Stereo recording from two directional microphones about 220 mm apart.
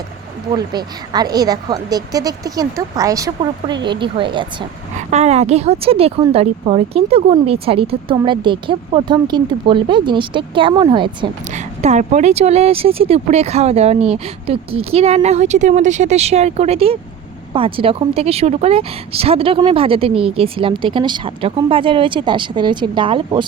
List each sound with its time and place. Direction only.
0.5 s a woman's voice: 20° right (ahead or behind)